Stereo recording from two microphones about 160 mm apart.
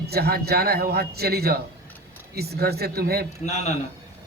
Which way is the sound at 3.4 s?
45° left (ahead or behind).